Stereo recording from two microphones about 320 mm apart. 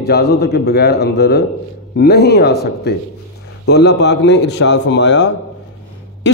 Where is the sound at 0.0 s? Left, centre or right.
Left.